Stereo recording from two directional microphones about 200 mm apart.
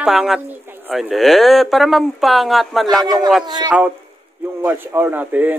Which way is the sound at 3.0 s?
20° right (ahead or behind).